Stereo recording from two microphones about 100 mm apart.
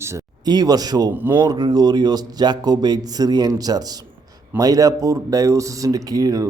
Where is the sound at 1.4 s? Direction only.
40° right (ahead or behind).